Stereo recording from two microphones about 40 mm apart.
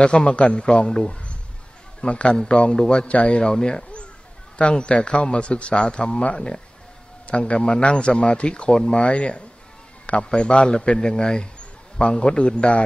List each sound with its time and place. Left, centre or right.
0.0 s a man's voice: left
2.0 s a man's voice: left
3.1 s a man's voice: left